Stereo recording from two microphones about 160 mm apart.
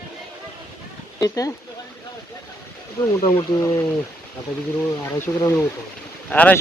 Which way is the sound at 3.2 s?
25° left (ahead or behind).